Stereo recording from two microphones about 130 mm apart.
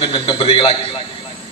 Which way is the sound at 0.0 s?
45° left (ahead or behind).